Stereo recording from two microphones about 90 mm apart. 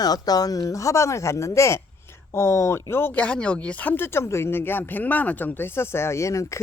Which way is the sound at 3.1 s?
15° left (ahead or behind).